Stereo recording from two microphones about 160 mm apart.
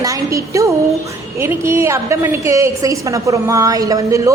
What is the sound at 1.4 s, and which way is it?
A woman's voice, 15° right (ahead or behind).